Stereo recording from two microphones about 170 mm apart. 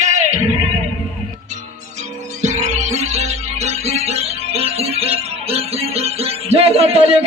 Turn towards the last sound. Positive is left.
turn(degrees=-35)  # may be behind; listen again after turning